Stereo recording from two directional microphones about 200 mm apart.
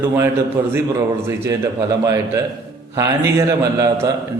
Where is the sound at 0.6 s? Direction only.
15° right (ahead or behind).